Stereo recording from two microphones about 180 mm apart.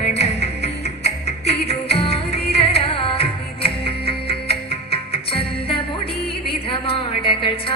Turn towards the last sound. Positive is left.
turn(degrees=30)  # may be behind; listen again after turning